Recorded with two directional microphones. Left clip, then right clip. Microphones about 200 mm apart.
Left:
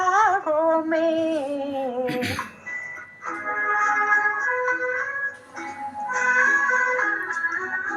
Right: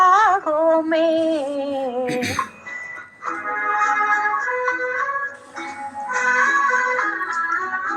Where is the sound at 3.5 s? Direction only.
25° right (ahead or behind).